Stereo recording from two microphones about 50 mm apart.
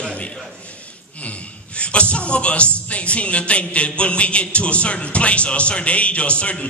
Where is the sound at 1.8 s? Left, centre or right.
Left.